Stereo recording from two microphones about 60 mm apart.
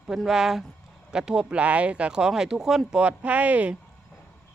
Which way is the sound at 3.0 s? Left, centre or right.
Right.